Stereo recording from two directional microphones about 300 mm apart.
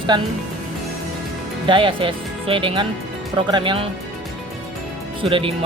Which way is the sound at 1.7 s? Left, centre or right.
Centre.